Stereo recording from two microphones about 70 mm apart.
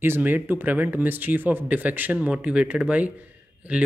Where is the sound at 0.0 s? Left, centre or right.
Right.